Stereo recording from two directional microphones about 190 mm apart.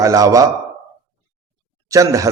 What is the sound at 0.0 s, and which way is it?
Speech, 15° right (ahead or behind).